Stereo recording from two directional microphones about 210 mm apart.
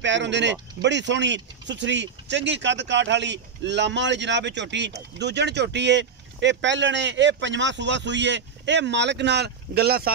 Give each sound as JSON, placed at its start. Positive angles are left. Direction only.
{"t": 0.0, "sound": "speech", "side_deg": -55}